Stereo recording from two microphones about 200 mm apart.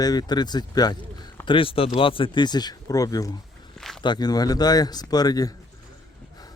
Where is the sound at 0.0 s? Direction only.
20° left (ahead or behind).